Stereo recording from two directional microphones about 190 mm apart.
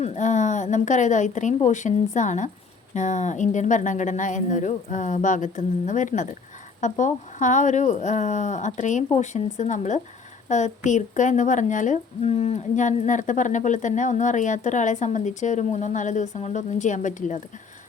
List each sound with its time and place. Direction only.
0.0 s a woman's voice: 35° left (ahead or behind)